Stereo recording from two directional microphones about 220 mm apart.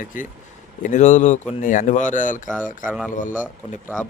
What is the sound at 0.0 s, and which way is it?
Speech, 35° left (ahead or behind).